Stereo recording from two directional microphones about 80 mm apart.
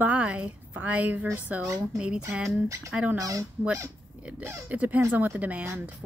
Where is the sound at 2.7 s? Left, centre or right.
Right.